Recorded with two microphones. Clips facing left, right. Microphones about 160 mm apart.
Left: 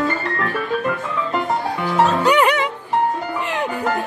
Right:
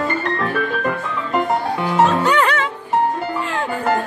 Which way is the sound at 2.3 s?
15° left (ahead or behind).